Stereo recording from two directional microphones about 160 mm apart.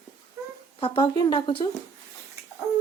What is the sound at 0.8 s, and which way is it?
Speech, 35° left (ahead or behind).